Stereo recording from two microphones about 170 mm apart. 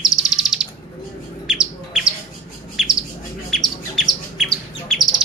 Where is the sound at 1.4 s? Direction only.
5° right (ahead or behind).